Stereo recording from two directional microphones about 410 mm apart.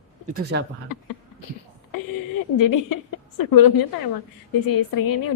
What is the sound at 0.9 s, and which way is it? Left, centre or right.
Speech, left.